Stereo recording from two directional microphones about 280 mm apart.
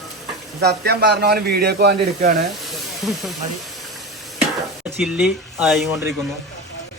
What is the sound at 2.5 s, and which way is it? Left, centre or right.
Snake, centre.